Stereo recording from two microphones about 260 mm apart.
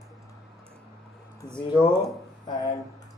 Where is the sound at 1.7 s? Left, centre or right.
Centre.